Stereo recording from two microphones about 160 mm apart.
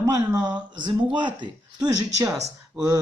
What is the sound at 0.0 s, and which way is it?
Speech, 25° right (ahead or behind).